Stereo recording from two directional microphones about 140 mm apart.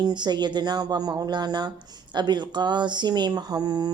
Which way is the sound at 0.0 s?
30° right (ahead or behind).